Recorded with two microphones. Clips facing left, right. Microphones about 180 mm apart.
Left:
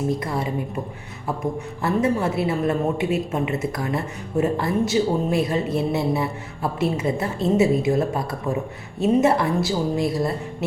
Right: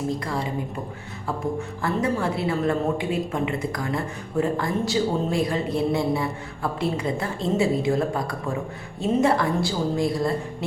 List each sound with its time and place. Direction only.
1.5 s a woman's voice: 20° left (ahead or behind)